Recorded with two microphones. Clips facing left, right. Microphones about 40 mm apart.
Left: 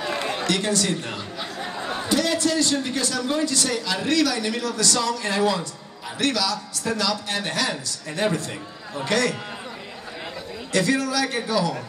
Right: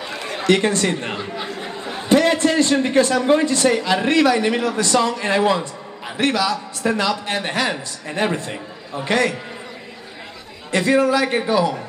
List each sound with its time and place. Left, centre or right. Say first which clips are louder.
0.4 s a man's voice: right 10 dB; right
10.7 s a man's voice: right 6 dB; right